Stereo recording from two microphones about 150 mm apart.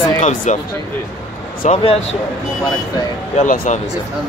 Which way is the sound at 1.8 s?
40° left (ahead or behind).